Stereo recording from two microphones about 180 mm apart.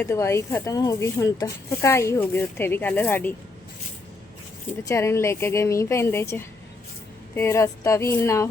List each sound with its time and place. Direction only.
0.0 s speech: 15° left (ahead or behind)
4.9 s speech: 15° left (ahead or behind)